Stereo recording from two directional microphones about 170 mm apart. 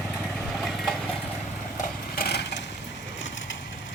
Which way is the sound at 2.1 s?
75° left (ahead or behind).